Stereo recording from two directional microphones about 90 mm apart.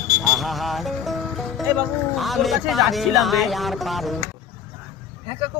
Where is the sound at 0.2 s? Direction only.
Centre (ahead or behind).